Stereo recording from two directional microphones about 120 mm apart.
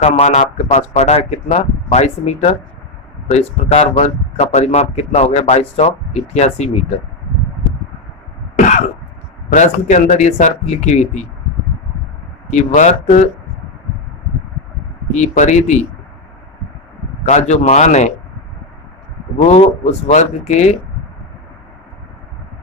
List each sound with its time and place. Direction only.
0.0 s speech: 65° left (ahead or behind)
8.5 s cough: 90° left
9.5 s speech: 90° left
12.5 s speech: 80° left
15.1 s speech: 80° left
17.2 s speech: 70° left (ahead or behind)
19.5 s speech: 65° left (ahead or behind)